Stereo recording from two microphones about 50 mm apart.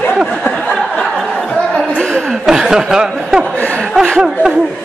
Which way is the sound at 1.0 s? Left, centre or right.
Centre.